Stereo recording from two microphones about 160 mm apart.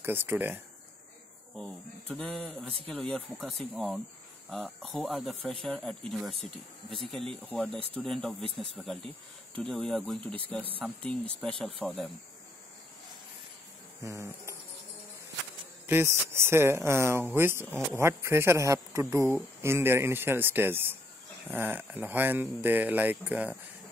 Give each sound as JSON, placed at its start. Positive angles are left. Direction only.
{"t": 0.0, "sound": "speech", "side_deg": -15}
{"t": 2.1, "sound": "speech", "side_deg": 5}
{"t": 14.0, "sound": "a sound", "side_deg": -20}
{"t": 15.9, "sound": "speech", "side_deg": -15}